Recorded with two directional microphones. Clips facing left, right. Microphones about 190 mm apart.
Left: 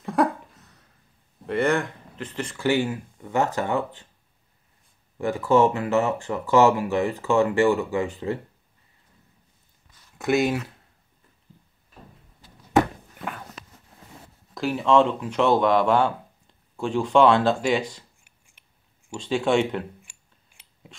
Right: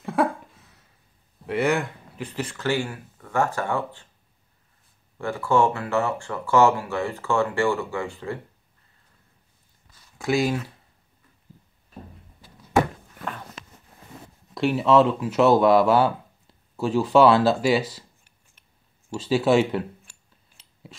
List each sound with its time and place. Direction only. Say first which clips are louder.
0.0 s a sound: left 1 dB; centre (ahead or behind)
1.4 s speech: even; 5° right (ahead or behind)
2.5 s speech: left 4 dB; 15° left (ahead or behind)
5.2 s speech: left 2 dB; 15° left (ahead or behind)
10.1 s speech: left 1 dB; centre (ahead or behind)
14.5 s speech: right 2 dB; centre (ahead or behind)
19.1 s speech: right 2 dB; 5° right (ahead or behind)